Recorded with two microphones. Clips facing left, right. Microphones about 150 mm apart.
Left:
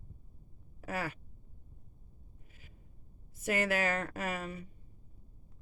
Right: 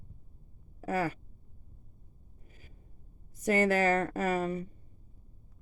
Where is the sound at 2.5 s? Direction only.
40° right (ahead or behind).